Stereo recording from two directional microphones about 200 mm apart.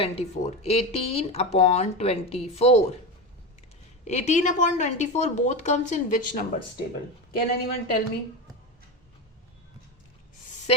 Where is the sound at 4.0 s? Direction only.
35° left (ahead or behind).